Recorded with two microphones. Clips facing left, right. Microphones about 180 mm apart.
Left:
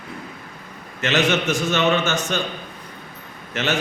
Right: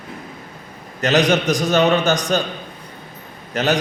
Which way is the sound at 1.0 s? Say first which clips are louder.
Right 4 dB; 40° right (ahead or behind).